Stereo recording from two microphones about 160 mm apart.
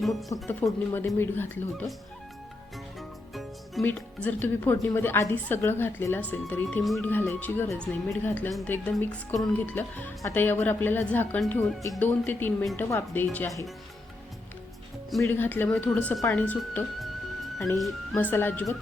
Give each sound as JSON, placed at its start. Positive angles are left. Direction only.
{"t": 0.0, "sound": "speech", "side_deg": 0}
{"t": 0.4, "sound": "a woman's voice", "side_deg": 15}
{"t": 3.0, "sound": "music", "side_deg": 0}
{"t": 3.8, "sound": "a woman's voice", "side_deg": 10}
{"t": 6.8, "sound": "speech", "side_deg": 0}
{"t": 7.1, "sound": "a woman's voice", "side_deg": 10}
{"t": 11.8, "sound": "a woman's voice", "side_deg": 15}
{"t": 15.2, "sound": "a woman's voice", "side_deg": 10}
{"t": 16.3, "sound": "music", "side_deg": 10}
{"t": 17.7, "sound": "speech", "side_deg": 0}
{"t": 18.2, "sound": "a woman's voice", "side_deg": 10}